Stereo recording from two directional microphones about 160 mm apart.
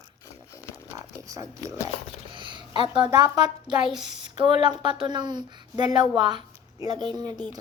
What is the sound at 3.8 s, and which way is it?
Speech, centre (ahead or behind).